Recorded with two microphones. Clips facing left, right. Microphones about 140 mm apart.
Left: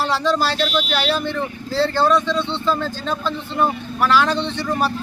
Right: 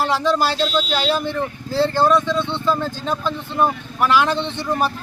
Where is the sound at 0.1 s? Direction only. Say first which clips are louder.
Right 1 dB; 15° right (ahead or behind).